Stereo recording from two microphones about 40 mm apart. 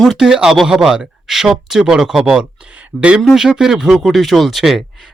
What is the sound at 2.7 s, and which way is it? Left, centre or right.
Speech, right.